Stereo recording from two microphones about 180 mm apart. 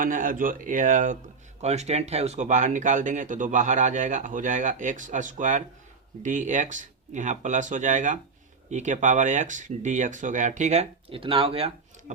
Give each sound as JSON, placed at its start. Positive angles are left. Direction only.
{"t": 0.0, "sound": "speech", "side_deg": -50}